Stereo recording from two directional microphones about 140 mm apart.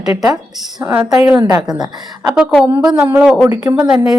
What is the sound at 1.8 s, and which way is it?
Speech, 30° right (ahead or behind).